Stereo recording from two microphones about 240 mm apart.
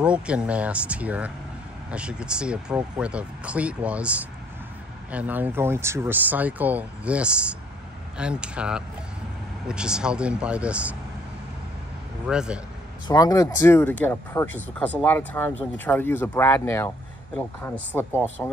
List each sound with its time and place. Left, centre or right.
0.0 s speech: centre
12.3 s speech: centre
13.1 s speech: centre